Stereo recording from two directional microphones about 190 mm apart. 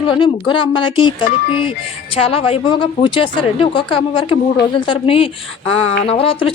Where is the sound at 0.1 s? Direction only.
25° left (ahead or behind).